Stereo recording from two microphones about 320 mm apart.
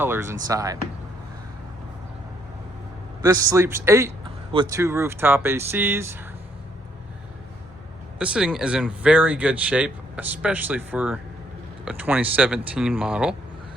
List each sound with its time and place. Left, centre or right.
0.0 s speech: centre
3.2 s speech: centre
8.2 s speech: centre